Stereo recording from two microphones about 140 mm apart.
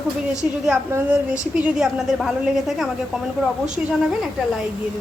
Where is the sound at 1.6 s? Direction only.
5° right (ahead or behind).